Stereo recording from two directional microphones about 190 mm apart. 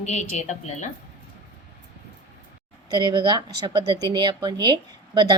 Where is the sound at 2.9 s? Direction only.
25° right (ahead or behind).